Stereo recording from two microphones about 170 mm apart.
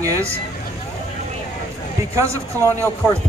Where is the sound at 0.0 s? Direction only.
20° right (ahead or behind).